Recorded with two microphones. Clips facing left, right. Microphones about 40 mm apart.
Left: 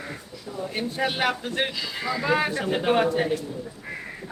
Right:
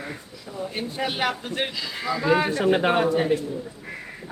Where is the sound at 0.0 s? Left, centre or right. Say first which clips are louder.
Even; centre.